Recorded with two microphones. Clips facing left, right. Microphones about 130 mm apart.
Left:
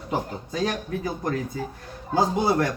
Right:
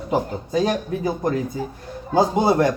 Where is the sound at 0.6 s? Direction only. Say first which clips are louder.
Right 4 dB; 20° right (ahead or behind).